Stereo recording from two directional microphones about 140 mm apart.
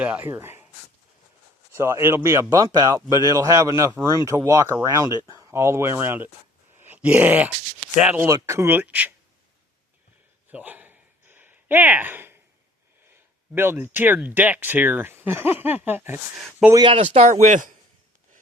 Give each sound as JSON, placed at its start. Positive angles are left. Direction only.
{"t": 0.0, "sound": "speech", "side_deg": -10}
{"t": 1.7, "sound": "speech", "side_deg": -20}
{"t": 6.7, "sound": "a sound", "side_deg": -15}
{"t": 7.9, "sound": "speech", "side_deg": -10}
{"t": 10.5, "sound": "a sound", "side_deg": -10}
{"t": 13.5, "sound": "speech", "side_deg": -15}
{"t": 16.9, "sound": "speech", "side_deg": -50}
{"t": 17.4, "sound": "a man's voice", "side_deg": -65}